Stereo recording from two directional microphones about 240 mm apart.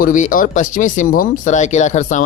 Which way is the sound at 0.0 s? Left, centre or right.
Left.